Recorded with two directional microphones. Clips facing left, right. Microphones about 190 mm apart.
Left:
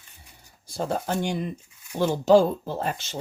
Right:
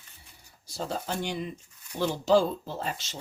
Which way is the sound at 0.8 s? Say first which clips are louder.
Left 5 dB; 55° left (ahead or behind).